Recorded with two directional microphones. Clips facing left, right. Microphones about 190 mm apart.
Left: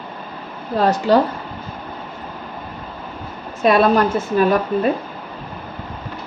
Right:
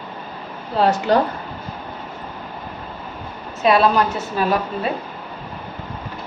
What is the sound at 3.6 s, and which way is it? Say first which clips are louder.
A woman's voice: left 2 dB; 50° left (ahead or behind).